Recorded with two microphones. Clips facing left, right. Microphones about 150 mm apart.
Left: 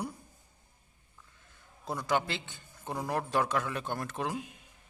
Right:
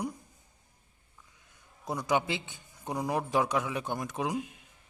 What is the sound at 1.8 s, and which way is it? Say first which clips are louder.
A man's voice: right 2 dB; 20° right (ahead or behind).